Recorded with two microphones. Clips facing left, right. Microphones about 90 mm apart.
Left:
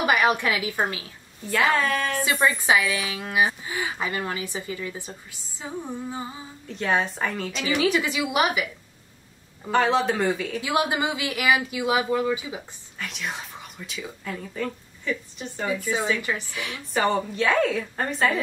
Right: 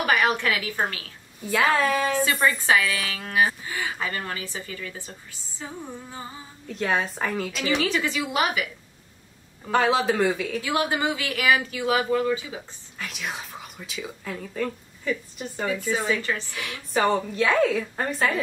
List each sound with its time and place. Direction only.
0.0 s a woman's voice: 15° left (ahead or behind)
1.4 s a woman's voice: 5° right (ahead or behind); by 6.2 s 15° left (ahead or behind)
6.7 s a woman's voice: centre (ahead or behind)
7.6 s speech: 10° left (ahead or behind)
9.7 s a woman's voice: centre (ahead or behind)
10.6 s speech: 15° left (ahead or behind)
13.0 s a woman's voice: centre (ahead or behind)
16.2 s speech: 15° left (ahead or behind)
16.5 s a woman's voice: centre (ahead or behind)